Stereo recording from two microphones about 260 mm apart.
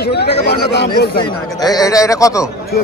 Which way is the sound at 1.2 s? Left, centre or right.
Centre.